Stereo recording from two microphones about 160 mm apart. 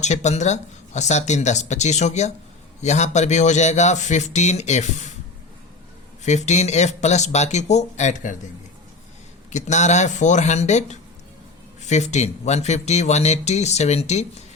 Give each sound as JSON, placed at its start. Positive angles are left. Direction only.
{"t": 0.0, "sound": "speech", "side_deg": 45}
{"t": 6.2, "sound": "speech", "side_deg": 45}
{"t": 9.5, "sound": "speech", "side_deg": 45}